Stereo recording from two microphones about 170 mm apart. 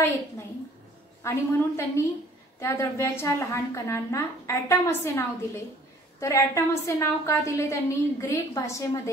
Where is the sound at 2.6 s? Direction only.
15° left (ahead or behind).